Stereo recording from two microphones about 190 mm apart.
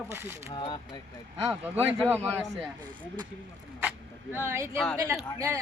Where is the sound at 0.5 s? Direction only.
25° left (ahead or behind).